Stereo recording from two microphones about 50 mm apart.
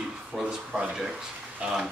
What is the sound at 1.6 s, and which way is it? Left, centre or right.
Speech, centre.